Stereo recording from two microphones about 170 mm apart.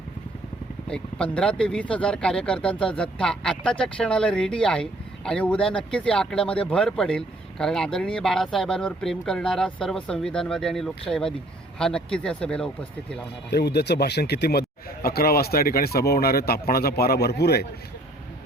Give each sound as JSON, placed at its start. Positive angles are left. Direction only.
{"t": 0.9, "sound": "speech", "side_deg": 5}
{"t": 13.5, "sound": "speech", "side_deg": 70}